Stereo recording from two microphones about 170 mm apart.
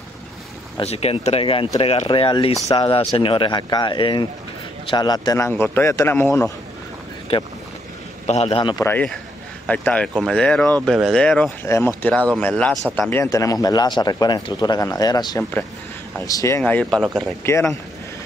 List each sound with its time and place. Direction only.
0.7 s a man's voice: 35° left (ahead or behind); by 6.5 s 15° left (ahead or behind)
8.3 s speech: 35° left (ahead or behind)
8.8 s a man's voice: 10° left (ahead or behind)
11.6 s a man's voice: 15° left (ahead or behind)